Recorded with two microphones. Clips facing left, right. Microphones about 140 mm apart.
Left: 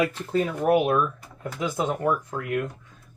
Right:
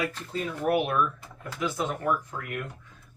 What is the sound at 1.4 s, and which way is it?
Speech, 20° left (ahead or behind).